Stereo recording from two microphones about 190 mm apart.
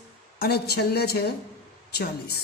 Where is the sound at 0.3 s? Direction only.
55° left (ahead or behind).